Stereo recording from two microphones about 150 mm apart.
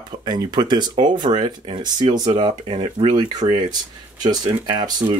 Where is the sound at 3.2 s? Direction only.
30° right (ahead or behind).